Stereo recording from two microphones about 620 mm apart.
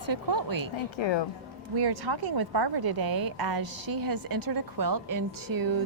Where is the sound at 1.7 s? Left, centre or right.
Right.